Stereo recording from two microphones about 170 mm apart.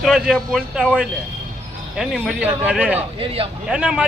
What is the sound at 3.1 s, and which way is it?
Speech, 35° right (ahead or behind).